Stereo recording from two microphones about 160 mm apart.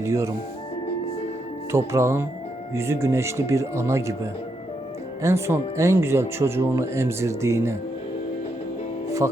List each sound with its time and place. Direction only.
0.0 s speech: 20° right (ahead or behind)
1.7 s speech: 15° right (ahead or behind)